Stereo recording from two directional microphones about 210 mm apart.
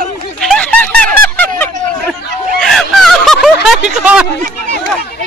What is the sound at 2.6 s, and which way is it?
Snicker, centre (ahead or behind).